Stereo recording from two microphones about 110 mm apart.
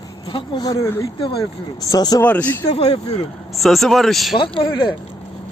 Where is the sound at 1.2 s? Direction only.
55° left (ahead or behind).